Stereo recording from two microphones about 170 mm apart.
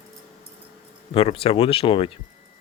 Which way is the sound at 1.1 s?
35° left (ahead or behind).